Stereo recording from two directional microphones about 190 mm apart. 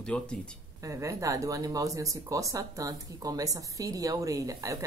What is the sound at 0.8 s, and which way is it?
Speech, 15° right (ahead or behind).